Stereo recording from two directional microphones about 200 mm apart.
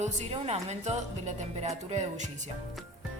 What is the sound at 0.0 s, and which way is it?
A woman's voice, 35° right (ahead or behind).